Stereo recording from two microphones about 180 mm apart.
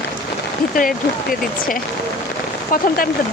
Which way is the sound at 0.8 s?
50° left (ahead or behind).